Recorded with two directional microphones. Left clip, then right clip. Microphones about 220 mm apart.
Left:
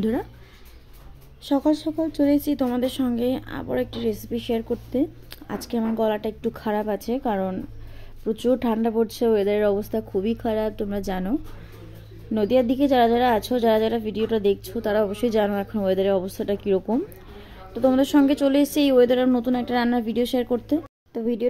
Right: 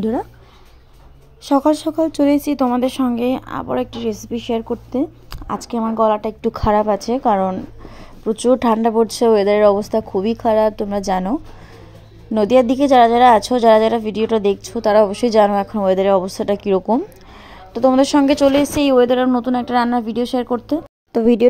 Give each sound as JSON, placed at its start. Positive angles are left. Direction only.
{"t": 0.0, "sound": "a woman's voice", "side_deg": -5}
{"t": 1.4, "sound": "a woman's voice", "side_deg": -30}
{"t": 12.4, "sound": "a woman's voice", "side_deg": -15}
{"t": 21.1, "sound": "speech", "side_deg": -35}